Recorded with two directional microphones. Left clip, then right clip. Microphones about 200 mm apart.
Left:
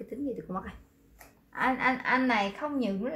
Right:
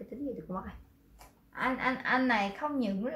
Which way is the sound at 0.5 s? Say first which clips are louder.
Left 3 dB; 50° left (ahead or behind).